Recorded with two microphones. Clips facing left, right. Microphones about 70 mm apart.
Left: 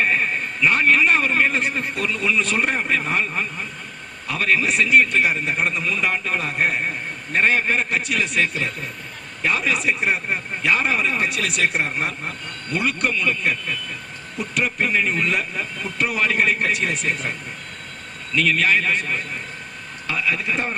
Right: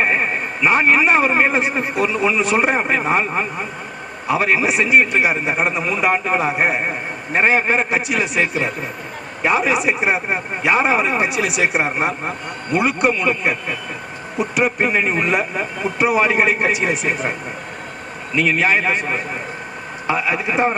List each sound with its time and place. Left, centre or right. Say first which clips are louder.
0.0 s a sound: right 2 dB; right
0.7 s speech: right 3 dB; centre
3.2 s speech: right 5 dB; right
6.4 s speech: right 4 dB; centre
18.3 s speech: right 2 dB; centre